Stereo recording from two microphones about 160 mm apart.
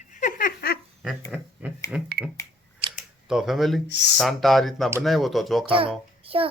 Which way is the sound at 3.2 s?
5° right (ahead or behind).